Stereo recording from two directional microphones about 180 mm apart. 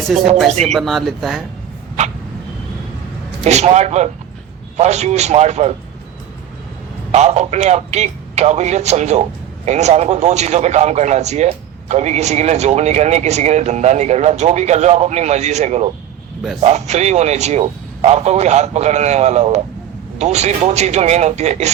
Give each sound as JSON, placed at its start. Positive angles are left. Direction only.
{"t": 0.6, "sound": "speech", "side_deg": 0}
{"t": 3.4, "sound": "speech", "side_deg": -40}
{"t": 7.1, "sound": "speech", "side_deg": -40}